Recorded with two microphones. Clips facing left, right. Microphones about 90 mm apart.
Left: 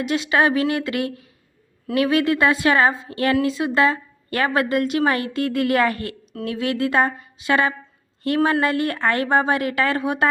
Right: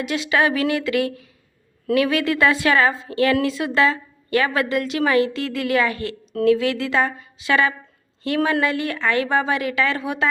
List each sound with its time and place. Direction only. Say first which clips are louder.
0.0 s a woman's voice: left 1 dB; 40° left (ahead or behind)